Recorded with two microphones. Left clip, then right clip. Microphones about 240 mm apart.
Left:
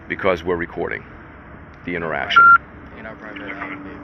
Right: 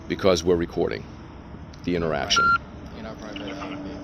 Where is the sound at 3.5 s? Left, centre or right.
Right.